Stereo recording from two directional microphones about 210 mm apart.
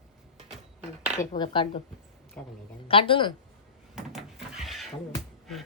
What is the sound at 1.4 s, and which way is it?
Speech, 25° left (ahead or behind).